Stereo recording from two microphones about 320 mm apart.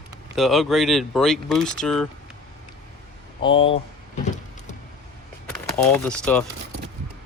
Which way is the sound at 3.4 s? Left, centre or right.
Centre.